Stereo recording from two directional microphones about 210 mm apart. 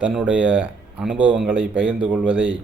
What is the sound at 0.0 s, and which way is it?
A man's voice, 5° right (ahead or behind).